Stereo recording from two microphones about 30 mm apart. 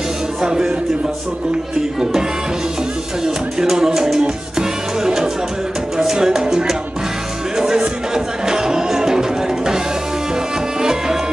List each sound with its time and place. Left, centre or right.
0.4 s music: right
3.5 s music: right
10.8 s music: right